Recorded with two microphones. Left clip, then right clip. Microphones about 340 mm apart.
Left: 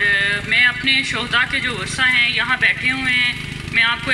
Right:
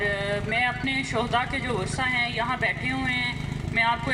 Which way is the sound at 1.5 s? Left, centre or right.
Right.